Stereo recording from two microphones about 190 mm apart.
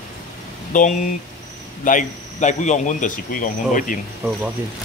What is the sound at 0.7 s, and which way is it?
Speech, 40° left (ahead or behind).